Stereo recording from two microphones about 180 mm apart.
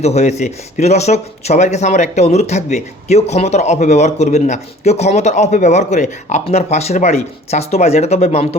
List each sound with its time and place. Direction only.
0.0 s speech: 40° left (ahead or behind)